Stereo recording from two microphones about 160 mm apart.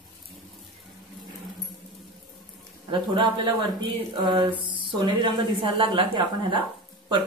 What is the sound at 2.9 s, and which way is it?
A man's voice, 25° right (ahead or behind).